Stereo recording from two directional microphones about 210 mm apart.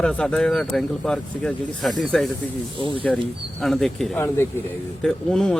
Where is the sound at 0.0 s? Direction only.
5° left (ahead or behind).